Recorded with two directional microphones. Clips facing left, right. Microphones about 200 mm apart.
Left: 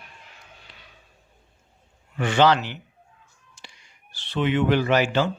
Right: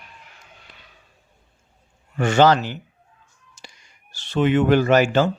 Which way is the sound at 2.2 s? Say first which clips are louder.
Right 3 dB; 45° right (ahead or behind).